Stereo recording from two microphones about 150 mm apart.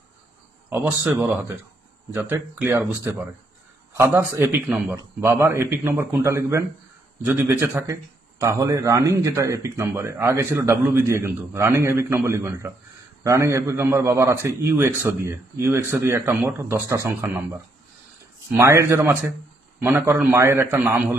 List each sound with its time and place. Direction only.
0.7 s a man's voice: 15° right (ahead or behind)